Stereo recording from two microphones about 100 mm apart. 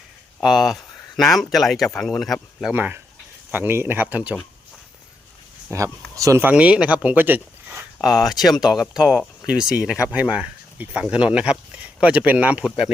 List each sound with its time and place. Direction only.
0.4 s speech: centre (ahead or behind)
2.7 s speech: 20° right (ahead or behind)
5.7 s speech: 30° right (ahead or behind)
6.4 s speech: 15° right (ahead or behind)
8.0 s speech: 5° right (ahead or behind)